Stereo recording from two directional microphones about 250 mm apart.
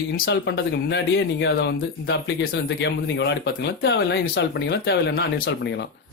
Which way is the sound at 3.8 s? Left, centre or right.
Left.